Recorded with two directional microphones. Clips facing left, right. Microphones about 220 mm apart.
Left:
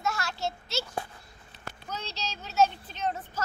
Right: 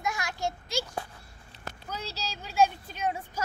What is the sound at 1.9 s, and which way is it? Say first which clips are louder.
A child's voice: even; 10° right (ahead or behind).